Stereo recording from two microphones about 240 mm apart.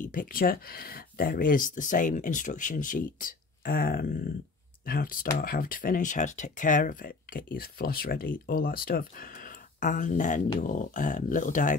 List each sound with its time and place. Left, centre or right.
0.0 s speech: left